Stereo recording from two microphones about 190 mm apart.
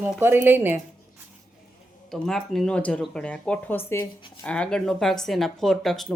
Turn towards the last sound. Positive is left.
turn(degrees=0)  # may be behind; listen again after turning